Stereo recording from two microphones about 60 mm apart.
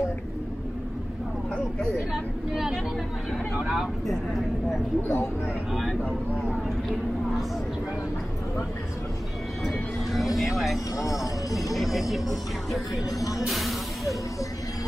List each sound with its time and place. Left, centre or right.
2.1 s speech: centre
4.1 s speech: centre
5.0 s speech: left
5.7 s speech: centre
9.7 s speech: centre